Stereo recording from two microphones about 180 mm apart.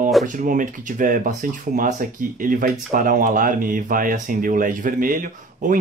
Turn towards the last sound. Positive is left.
turn(degrees=-50)  # may be behind; listen again after turning